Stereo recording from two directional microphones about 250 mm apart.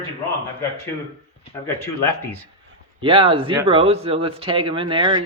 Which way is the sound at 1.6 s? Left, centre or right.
Centre.